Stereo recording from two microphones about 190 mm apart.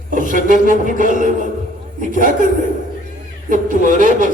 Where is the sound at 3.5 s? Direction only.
45° right (ahead or behind).